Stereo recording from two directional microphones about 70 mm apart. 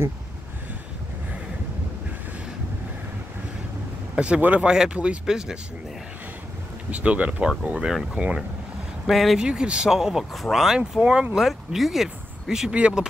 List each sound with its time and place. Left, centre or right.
4.1 s a sound: centre
4.4 s speech: centre
6.9 s speech: centre
9.0 s speech: centre
9.4 s speech: centre